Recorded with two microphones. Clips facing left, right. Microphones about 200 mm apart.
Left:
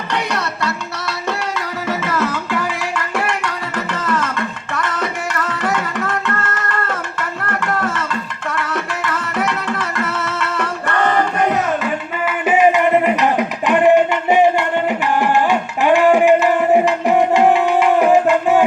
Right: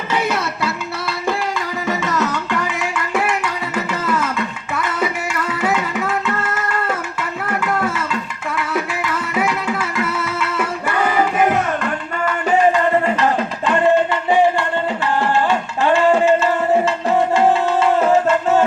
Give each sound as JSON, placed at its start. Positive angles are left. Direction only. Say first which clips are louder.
{"t": 0.1, "sound": "music", "louder": "right 2 dB", "side_deg": -5}
{"t": 1.9, "sound": "music", "louder": "even", "side_deg": 0}
{"t": 4.7, "sound": "tabla", "louder": "right 2 dB", "side_deg": -5}
{"t": 8.5, "sound": "music", "louder": "right 2 dB", "side_deg": -5}